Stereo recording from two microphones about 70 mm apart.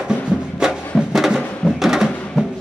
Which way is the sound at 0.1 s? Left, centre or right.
Centre.